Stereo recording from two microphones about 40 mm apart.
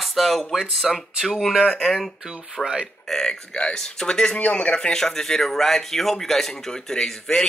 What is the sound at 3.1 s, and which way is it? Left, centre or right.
Speech, centre.